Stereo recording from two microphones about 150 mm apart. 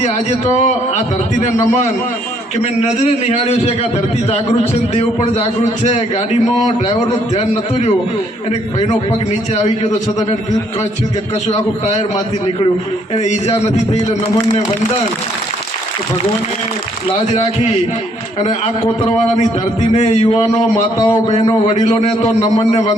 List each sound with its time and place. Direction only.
0.0 s a man's voice: 45° left (ahead or behind)
2.6 s a man's voice: 45° left (ahead or behind)
11.4 s a man's voice: 50° left (ahead or behind)
13.1 s a man's voice: 50° left (ahead or behind)
19.9 s a man's voice: 50° left (ahead or behind)
20.2 s a man's voice: 35° left (ahead or behind)
21.0 s a man's voice: 25° left (ahead or behind)
21.8 s a man's voice: 45° left (ahead or behind)